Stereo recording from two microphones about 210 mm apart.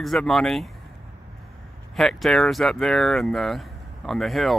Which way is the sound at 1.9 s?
Centre (ahead or behind).